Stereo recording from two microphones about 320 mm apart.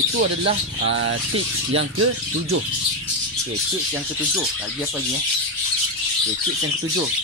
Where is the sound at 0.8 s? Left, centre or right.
Right.